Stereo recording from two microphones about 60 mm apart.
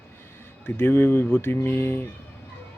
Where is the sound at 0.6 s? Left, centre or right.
Left.